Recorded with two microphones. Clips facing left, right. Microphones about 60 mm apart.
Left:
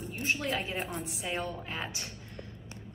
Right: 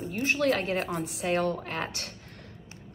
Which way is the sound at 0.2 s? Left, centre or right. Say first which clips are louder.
Right 6 dB; right.